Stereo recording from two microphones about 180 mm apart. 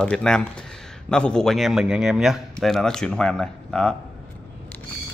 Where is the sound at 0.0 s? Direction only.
5° left (ahead or behind).